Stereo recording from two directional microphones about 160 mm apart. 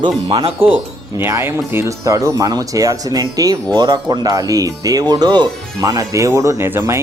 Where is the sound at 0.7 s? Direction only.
15° right (ahead or behind).